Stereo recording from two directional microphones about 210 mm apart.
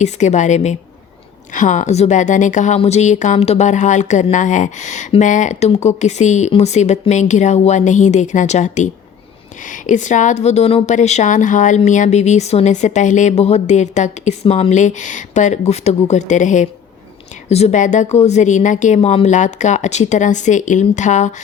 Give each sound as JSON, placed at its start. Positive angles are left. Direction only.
{"t": 0.0, "sound": "a woman's voice", "side_deg": 35}